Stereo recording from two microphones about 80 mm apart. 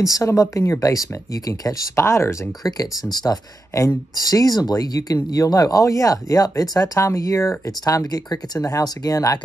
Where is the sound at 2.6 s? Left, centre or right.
Left.